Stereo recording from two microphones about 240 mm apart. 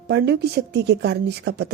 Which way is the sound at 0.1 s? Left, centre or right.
Right.